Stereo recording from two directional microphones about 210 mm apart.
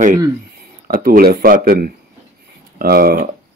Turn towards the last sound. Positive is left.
turn(degrees=-45)  # may be behind; listen again after turning